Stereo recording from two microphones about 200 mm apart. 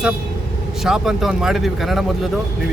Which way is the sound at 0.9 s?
Centre (ahead or behind).